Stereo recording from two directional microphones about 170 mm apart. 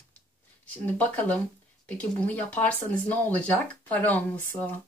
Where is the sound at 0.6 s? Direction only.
10° left (ahead or behind).